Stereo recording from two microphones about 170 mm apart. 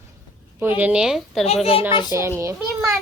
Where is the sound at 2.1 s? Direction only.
15° right (ahead or behind).